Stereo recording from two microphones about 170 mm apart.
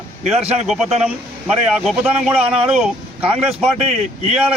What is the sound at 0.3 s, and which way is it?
Speech, 40° right (ahead or behind).